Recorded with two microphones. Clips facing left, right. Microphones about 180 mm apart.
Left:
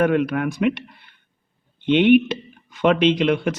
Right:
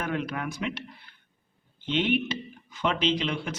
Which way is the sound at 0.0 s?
60° left (ahead or behind).